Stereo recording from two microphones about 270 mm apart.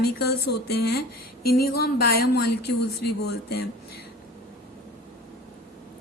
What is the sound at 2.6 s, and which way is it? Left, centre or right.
A woman's voice, left.